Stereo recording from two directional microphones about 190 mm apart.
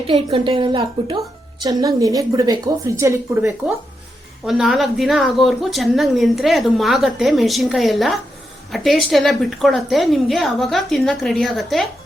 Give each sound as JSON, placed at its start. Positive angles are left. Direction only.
{"t": 0.1, "sound": "a woman's voice", "side_deg": -25}
{"t": 4.4, "sound": "speech", "side_deg": -5}